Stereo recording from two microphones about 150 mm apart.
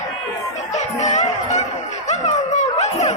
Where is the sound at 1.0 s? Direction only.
50° left (ahead or behind).